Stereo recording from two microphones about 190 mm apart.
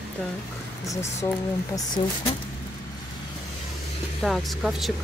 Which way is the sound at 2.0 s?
25° left (ahead or behind).